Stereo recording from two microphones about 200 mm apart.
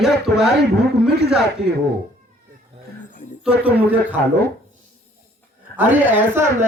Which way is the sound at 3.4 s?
10° right (ahead or behind).